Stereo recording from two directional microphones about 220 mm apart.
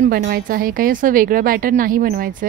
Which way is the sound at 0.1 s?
40° right (ahead or behind).